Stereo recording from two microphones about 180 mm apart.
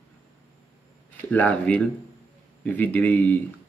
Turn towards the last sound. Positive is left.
turn(degrees=10)  # may be behind; listen again after turning